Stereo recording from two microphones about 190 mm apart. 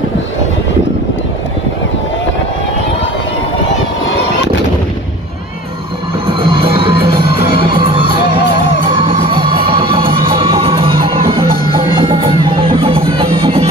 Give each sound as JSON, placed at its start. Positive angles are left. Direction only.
{"t": 6.2, "sound": "music", "side_deg": -25}
{"t": 7.2, "sound": "music", "side_deg": 55}
{"t": 7.5, "sound": "music", "side_deg": -25}
{"t": 9.2, "sound": "music", "side_deg": -25}